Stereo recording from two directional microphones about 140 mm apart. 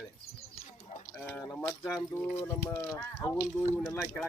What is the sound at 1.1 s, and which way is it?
Clip-clop, 15° left (ahead or behind).